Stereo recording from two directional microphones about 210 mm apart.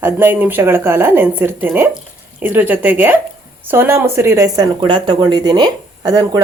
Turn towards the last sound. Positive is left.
turn(degrees=-20)  # may be behind; listen again after turning